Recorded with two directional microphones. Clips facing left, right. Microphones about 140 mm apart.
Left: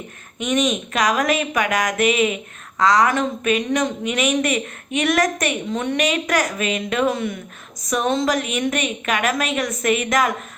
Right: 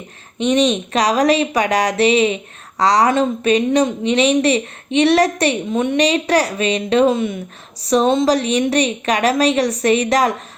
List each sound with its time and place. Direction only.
0.3 s a woman's voice: 30° right (ahead or behind)
5.7 s a woman's voice: 20° right (ahead or behind)
6.0 s a woman's voice: 35° right (ahead or behind)